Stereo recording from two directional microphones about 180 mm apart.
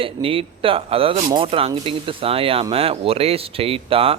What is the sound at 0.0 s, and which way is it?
A man's voice, 30° right (ahead or behind).